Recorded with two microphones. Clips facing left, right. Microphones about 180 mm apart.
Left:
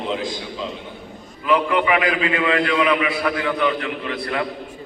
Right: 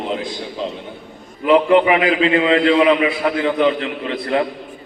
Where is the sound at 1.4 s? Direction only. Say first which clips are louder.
Right 7 dB; 25° right (ahead or behind).